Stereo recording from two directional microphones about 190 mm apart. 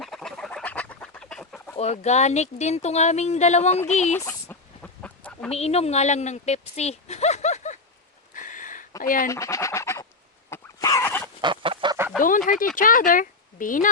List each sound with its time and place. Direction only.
0.0 s chicken: centre (ahead or behind)
1.7 s speech: 35° left (ahead or behind)
4.2 s chicken: 10° left (ahead or behind)
5.5 s speech: 35° left (ahead or behind)
8.3 s a sound: 45° left (ahead or behind)
9.2 s fowl: 15° left (ahead or behind)
10.5 s a sound: 15° left (ahead or behind)
11.3 s chicken: 25° right (ahead or behind)
11.9 s chicken: 10° right (ahead or behind)
12.5 s speech: 45° left (ahead or behind)